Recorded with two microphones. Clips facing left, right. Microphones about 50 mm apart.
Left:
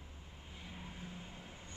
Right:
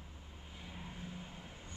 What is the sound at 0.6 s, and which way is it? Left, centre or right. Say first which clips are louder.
Vehicle: right 1 dB; centre.